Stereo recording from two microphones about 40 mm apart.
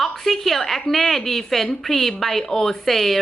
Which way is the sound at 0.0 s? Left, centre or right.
Centre.